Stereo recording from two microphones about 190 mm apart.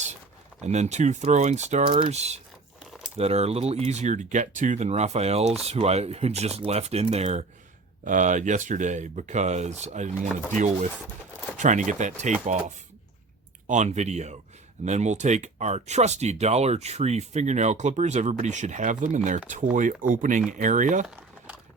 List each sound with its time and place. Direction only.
0.6 s speech: 35° right (ahead or behind)
11.5 s speech: 40° right (ahead or behind)